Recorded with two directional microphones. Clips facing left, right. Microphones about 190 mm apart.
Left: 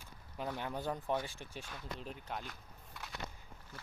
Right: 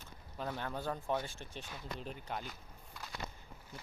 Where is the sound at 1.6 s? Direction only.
5° right (ahead or behind).